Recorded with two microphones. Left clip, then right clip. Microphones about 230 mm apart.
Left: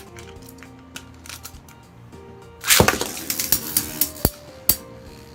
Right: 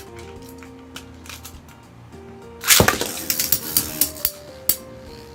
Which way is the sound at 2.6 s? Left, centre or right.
Centre.